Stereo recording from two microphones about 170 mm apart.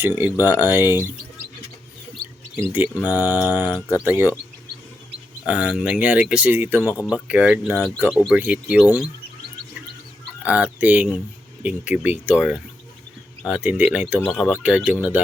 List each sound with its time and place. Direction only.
0.0 s speech: 10° right (ahead or behind)
2.6 s speech: 10° right (ahead or behind)
3.1 s mantra: 20° left (ahead or behind)
3.8 s speech: 20° left (ahead or behind)
4.0 s speech: 10° right (ahead or behind)
5.5 s speech: 10° right (ahead or behind)
10.4 s speech: 10° right (ahead or behind)